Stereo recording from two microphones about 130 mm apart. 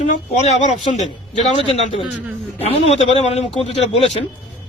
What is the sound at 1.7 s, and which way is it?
Speech, 45° left (ahead or behind).